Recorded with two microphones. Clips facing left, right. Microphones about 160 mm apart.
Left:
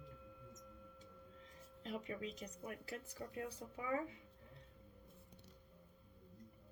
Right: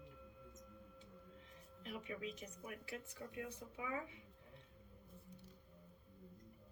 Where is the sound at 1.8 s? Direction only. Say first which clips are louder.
Left 2 dB; 40° left (ahead or behind).